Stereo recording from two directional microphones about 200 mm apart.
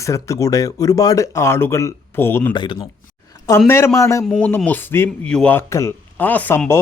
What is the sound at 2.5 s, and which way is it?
Speech, 25° left (ahead or behind).